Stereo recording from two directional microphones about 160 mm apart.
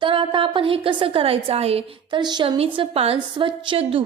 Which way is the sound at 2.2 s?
30° right (ahead or behind).